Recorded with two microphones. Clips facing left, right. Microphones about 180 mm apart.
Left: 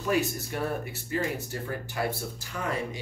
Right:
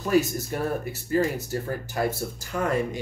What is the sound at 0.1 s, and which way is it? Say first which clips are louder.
Speech: right 6 dB; 40° right (ahead or behind).